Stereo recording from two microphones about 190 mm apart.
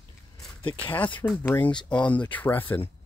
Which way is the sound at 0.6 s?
25° left (ahead or behind).